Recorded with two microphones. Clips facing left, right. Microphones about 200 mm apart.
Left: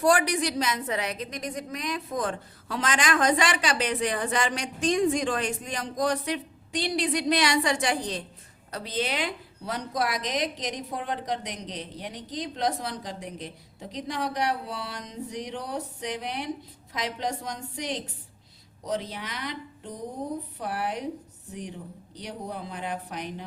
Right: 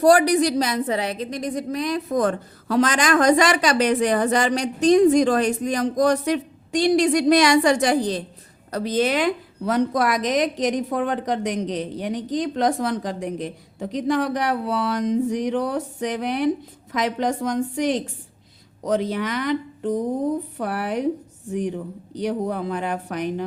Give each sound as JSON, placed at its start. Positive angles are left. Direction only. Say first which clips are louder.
{"t": 0.0, "sound": "a woman's voice", "louder": "right 8 dB", "side_deg": -40}
{"t": 2.1, "sound": "a woman's voice", "louder": "right 11 dB", "side_deg": -45}